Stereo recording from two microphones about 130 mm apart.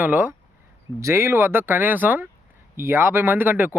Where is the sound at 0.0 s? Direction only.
15° right (ahead or behind).